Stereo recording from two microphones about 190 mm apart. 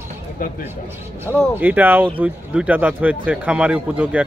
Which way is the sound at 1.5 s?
10° right (ahead or behind).